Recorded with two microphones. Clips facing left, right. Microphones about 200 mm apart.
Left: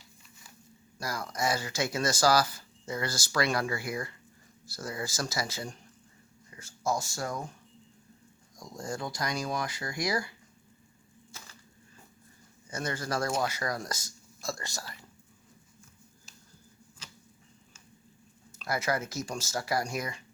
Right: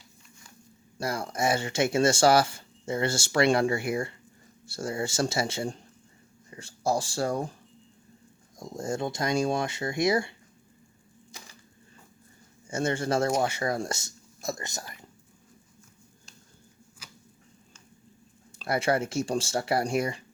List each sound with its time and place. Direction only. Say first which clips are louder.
0.9 s speech: right 5 dB; 30° right (ahead or behind)
8.5 s speech: right 6 dB; 25° right (ahead or behind)
11.3 s a sound: right 2 dB; 15° right (ahead or behind)
12.6 s speech: right 7 dB; 25° right (ahead or behind)
18.5 s speech: right 5 dB; 30° right (ahead or behind)